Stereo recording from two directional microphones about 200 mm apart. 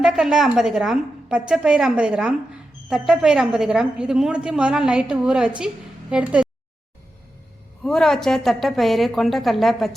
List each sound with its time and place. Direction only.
0.0 s a woman's voice: centre (ahead or behind)
7.9 s a woman's voice: centre (ahead or behind)